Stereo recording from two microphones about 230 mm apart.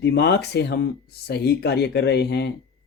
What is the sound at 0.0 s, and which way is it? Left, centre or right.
Speech, left.